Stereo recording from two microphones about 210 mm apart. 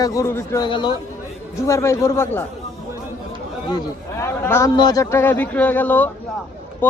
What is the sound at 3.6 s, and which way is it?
A man's voice, 15° left (ahead or behind).